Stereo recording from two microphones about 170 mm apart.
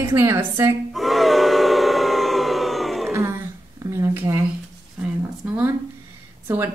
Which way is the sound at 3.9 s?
15° right (ahead or behind).